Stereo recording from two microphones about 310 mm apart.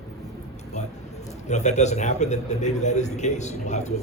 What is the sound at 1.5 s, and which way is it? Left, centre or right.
A man's voice, left.